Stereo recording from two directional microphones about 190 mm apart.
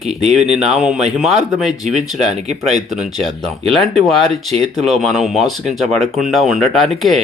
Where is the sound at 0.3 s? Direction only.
Centre (ahead or behind).